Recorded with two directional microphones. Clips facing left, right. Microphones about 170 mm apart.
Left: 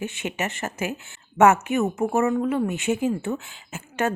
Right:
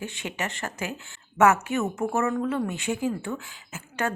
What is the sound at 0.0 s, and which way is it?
Speech, 20° left (ahead or behind).